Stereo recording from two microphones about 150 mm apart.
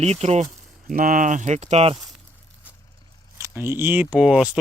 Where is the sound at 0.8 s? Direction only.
65° right (ahead or behind); by 2.0 s 45° right (ahead or behind).